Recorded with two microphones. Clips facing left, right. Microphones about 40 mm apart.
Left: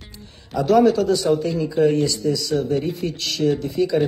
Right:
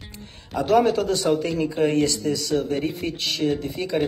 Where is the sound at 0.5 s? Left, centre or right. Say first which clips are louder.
Left 3 dB; right.